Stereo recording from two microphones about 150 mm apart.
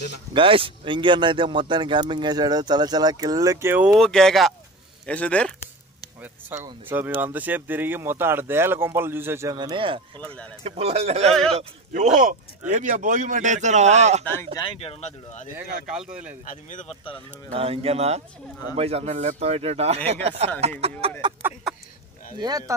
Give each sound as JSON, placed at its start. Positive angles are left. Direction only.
{"t": 0.3, "sound": "speech", "side_deg": -35}
{"t": 4.0, "sound": "speech", "side_deg": 5}
{"t": 6.6, "sound": "speech", "side_deg": -15}
{"t": 14.2, "sound": "speech", "side_deg": 15}
{"t": 14.6, "sound": "speech", "side_deg": 40}
{"t": 15.5, "sound": "speech", "side_deg": -5}
{"t": 17.6, "sound": "speech", "side_deg": -40}
{"t": 21.4, "sound": "speech", "side_deg": -15}
{"t": 22.4, "sound": "speech", "side_deg": -25}